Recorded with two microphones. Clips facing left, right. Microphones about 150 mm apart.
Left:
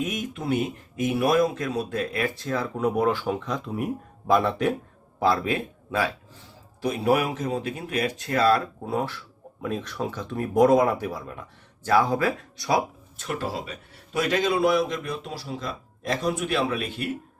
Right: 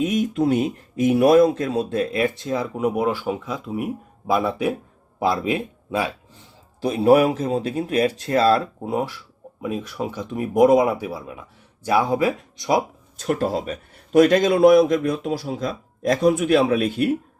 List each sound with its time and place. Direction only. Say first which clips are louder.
0.0 s speech: right 9 dB; 30° right (ahead or behind)
6.8 s speech: right 7 dB; 30° right (ahead or behind)
9.0 s speech: right 2 dB; 10° right (ahead or behind)
13.1 s a man's voice: right 8 dB; 45° right (ahead or behind)